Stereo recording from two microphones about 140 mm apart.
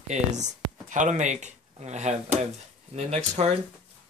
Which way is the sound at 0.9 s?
60° right (ahead or behind).